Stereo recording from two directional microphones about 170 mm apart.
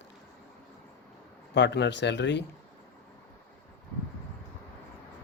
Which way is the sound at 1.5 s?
90° left.